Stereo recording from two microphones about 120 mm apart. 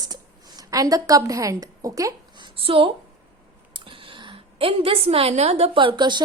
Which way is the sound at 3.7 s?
45° right (ahead or behind).